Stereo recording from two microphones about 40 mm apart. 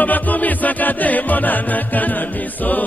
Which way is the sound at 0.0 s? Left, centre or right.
Left.